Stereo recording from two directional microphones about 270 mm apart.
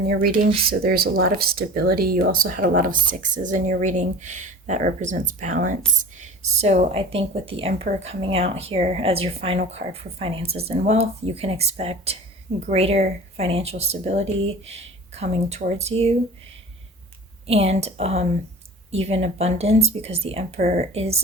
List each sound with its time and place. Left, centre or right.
0.1 s a woman's voice: right
17.4 s a woman's voice: right